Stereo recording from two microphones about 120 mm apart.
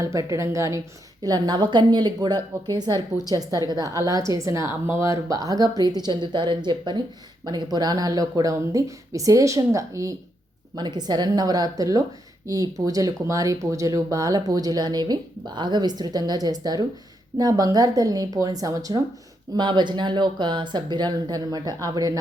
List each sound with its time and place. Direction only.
0.0 s speech: 25° right (ahead or behind)
10.8 s speech: 35° right (ahead or behind)